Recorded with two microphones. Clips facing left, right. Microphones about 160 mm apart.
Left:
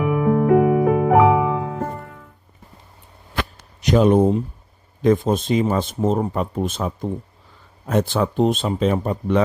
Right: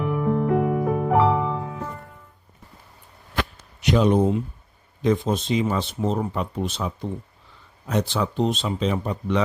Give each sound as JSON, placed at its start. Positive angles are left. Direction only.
{"t": 0.0, "sound": "music", "side_deg": 70}
{"t": 1.8, "sound": "music", "side_deg": 55}
{"t": 3.8, "sound": "speech", "side_deg": 50}